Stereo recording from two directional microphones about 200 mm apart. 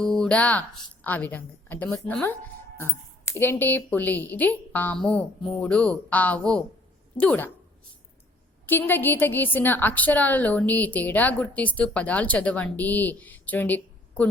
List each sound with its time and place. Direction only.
0.2 s a woman's voice: 5° left (ahead or behind)
8.6 s a woman's voice: 10° left (ahead or behind)